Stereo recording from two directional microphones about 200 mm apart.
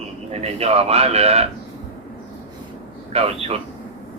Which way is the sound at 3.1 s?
30° right (ahead or behind).